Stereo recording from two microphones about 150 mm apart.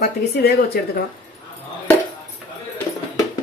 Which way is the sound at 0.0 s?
90° left.